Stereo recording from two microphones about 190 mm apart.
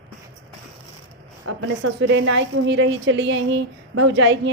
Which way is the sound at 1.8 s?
75° right (ahead or behind).